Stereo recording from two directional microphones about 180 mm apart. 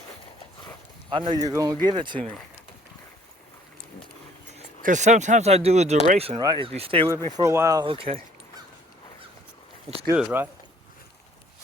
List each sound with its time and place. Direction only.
1.1 s speech: 25° right (ahead or behind)
4.5 s speech: 45° right (ahead or behind)
6.4 s speech: 25° right (ahead or behind)
7.3 s speech: 15° right (ahead or behind); by 8.2 s 30° right (ahead or behind)
10.2 s speech: 10° right (ahead or behind)